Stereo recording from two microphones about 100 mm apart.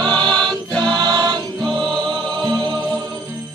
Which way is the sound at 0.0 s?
50° right (ahead or behind).